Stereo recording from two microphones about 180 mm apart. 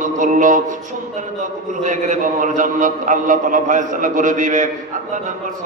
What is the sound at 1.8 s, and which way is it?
A man's voice, 45° right (ahead or behind).